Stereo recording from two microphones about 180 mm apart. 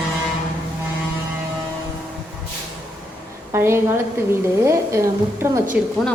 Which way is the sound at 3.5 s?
15° right (ahead or behind).